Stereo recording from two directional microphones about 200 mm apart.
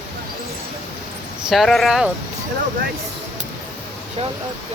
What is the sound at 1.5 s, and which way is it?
Speech, centre (ahead or behind).